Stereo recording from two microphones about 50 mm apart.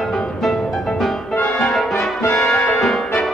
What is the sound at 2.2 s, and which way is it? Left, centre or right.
Brass instrument, centre.